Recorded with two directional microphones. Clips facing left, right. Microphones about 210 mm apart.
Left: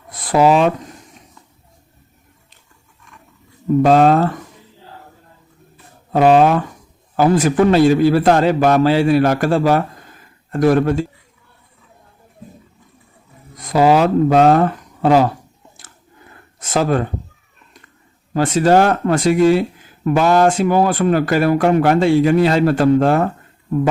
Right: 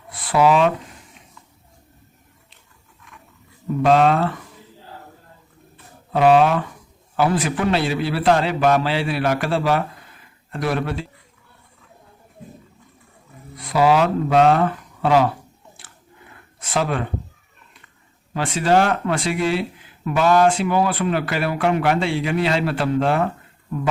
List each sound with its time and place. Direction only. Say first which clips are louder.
0.1 s a sound: left 3 dB; 40° left (ahead or behind)
3.8 s speech: left 3 dB; 40° left (ahead or behind)
6.1 s speech: left 3 dB; 45° left (ahead or behind)
13.6 s speech: left 4 dB; 40° left (ahead or behind)
16.6 s speech: left 5 dB; 40° left (ahead or behind)
18.3 s speech: left 5 dB; 40° left (ahead or behind)